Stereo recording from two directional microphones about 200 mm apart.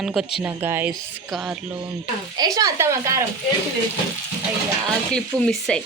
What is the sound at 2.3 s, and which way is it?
Speech, 20° right (ahead or behind).